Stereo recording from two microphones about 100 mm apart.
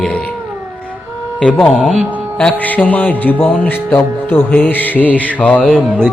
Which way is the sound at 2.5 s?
15° left (ahead or behind).